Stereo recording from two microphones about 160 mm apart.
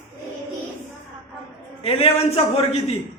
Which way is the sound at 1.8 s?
35° left (ahead or behind).